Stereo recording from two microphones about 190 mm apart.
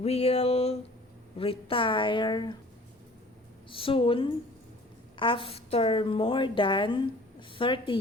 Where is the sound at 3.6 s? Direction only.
30° left (ahead or behind).